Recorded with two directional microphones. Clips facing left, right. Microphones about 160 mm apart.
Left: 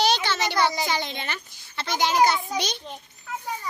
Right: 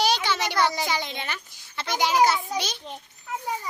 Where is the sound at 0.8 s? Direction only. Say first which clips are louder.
Left 1 dB; 10° right (ahead or behind).